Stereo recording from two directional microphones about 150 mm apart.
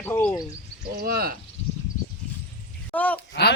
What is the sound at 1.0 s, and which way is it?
Speech, 80° right.